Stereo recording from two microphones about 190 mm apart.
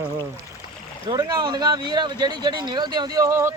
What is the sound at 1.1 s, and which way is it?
Speech, 20° right (ahead or behind).